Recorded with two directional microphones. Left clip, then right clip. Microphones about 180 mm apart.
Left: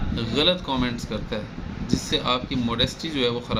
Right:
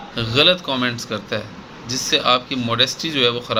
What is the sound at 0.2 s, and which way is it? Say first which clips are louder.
A man's voice: right 7 dB; 20° left (ahead or behind).